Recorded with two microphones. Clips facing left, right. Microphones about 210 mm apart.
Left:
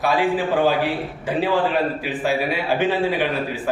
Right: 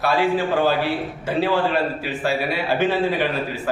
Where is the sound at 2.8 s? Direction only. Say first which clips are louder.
Right 1 dB; 15° left (ahead or behind).